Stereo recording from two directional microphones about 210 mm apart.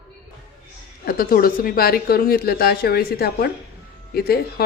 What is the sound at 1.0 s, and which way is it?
A woman's voice, 45° left (ahead or behind).